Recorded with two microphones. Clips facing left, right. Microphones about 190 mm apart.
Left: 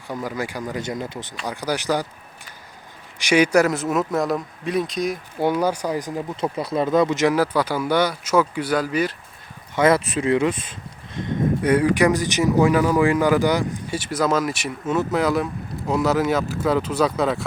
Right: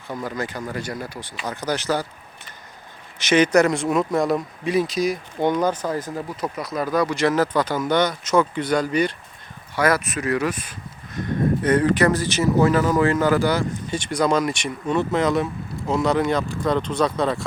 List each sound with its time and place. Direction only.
0.1 s speech: 10° left (ahead or behind)
3.2 s speech: 10° left (ahead or behind)
6.3 s speech: 30° left (ahead or behind); by 9.1 s 5° left (ahead or behind)
9.7 s speech: 25° left (ahead or behind)
11.6 s speech: 10° left (ahead or behind)